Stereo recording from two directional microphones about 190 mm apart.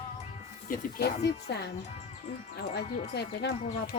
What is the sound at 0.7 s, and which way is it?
Speech, 60° left (ahead or behind).